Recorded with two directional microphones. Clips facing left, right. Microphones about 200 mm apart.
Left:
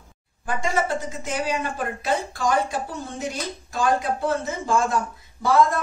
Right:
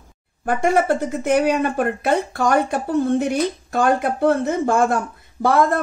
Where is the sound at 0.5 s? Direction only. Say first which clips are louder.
Right 7 dB; 60° right (ahead or behind).